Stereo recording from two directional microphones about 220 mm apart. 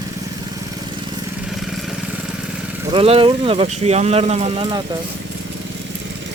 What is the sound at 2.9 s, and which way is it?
Speech, 25° right (ahead or behind).